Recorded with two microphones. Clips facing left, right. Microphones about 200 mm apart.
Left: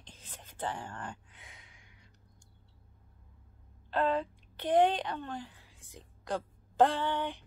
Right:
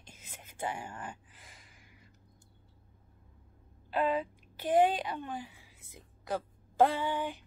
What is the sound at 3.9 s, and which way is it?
A woman's voice, 10° right (ahead or behind).